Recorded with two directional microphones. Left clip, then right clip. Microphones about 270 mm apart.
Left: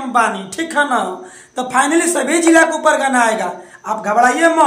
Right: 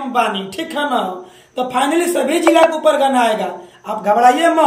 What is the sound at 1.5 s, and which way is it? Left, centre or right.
A man's voice, centre.